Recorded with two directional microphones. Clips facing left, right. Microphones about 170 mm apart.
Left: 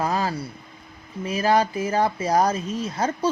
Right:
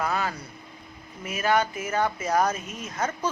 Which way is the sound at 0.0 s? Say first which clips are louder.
Left 4 dB; 35° left (ahead or behind).